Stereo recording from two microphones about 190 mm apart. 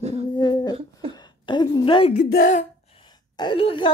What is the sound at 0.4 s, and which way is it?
Humming, 20° left (ahead or behind).